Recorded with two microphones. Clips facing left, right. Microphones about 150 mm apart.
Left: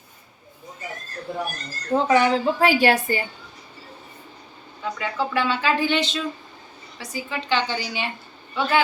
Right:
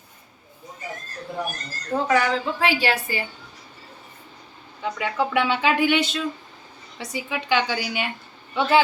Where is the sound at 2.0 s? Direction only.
25° left (ahead or behind); by 3.0 s 45° left (ahead or behind).